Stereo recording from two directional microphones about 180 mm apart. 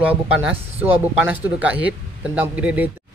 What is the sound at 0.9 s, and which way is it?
A man's voice, 10° right (ahead or behind).